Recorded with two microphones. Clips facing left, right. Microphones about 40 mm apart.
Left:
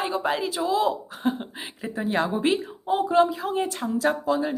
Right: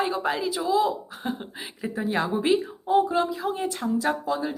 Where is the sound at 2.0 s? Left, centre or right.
Left.